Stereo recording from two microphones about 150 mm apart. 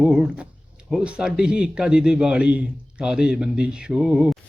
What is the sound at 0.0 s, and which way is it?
A man's voice, 5° right (ahead or behind).